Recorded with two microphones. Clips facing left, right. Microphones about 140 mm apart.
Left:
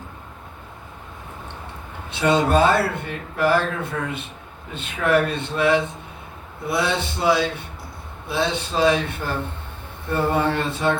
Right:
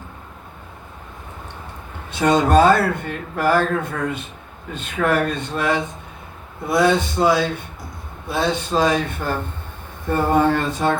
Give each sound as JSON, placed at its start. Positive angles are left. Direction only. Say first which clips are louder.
{"t": 2.0, "sound": "speech", "louder": "right 2 dB", "side_deg": -45}